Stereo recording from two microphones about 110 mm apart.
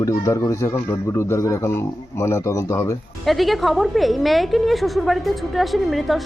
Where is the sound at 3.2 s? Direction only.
Centre (ahead or behind).